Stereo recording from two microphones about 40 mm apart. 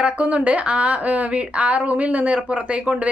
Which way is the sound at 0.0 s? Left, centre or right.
Right.